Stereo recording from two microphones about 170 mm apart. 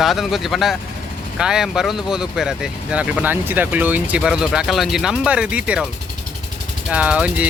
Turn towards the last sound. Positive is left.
turn(degrees=-5)  # may be behind; listen again after turning